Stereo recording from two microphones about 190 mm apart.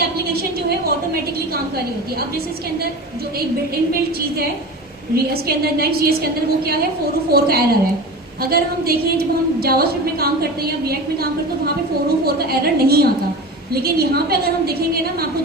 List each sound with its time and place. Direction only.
5.1 s a woman's voice: 55° right (ahead or behind)